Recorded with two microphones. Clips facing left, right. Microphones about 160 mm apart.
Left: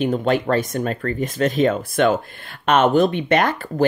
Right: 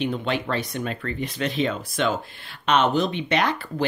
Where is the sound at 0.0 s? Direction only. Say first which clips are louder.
Left 6 dB; 45° left (ahead or behind).